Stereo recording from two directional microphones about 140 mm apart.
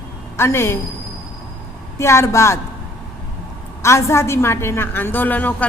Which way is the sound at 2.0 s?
20° left (ahead or behind).